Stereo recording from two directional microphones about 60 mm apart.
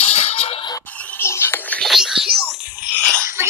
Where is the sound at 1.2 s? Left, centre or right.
Left.